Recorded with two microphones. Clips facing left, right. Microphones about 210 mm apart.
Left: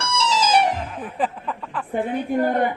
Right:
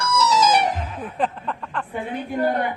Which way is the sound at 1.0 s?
5° left (ahead or behind).